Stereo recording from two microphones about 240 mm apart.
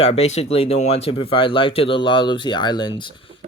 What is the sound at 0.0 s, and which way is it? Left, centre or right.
Speech, left.